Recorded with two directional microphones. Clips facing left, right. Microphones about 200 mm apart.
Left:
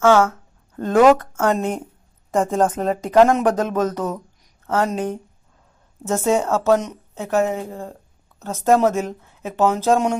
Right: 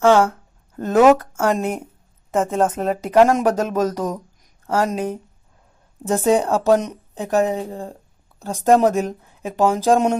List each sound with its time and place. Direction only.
0.0 s speech: 15° right (ahead or behind)